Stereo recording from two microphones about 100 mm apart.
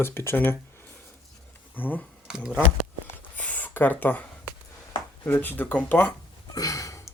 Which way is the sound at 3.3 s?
15° left (ahead or behind).